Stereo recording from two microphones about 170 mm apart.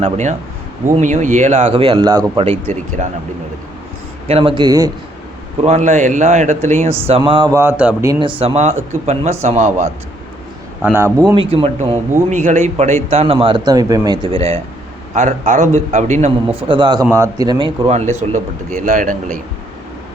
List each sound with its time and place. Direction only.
0.0 s a man's voice: 45° right (ahead or behind)
4.3 s speech: 35° right (ahead or behind)
5.6 s a man's voice: 45° right (ahead or behind)
7.2 s speech: 25° right (ahead or behind)
7.5 s speech: 15° right (ahead or behind)
8.3 s a man's voice: 35° right (ahead or behind)
10.8 s speech: 15° right (ahead or behind)
11.3 s a man's voice: 35° right (ahead or behind)
15.1 s a man's voice: 45° right (ahead or behind)
16.6 s speech: 30° right (ahead or behind)
17.8 s a man's voice: 40° right (ahead or behind)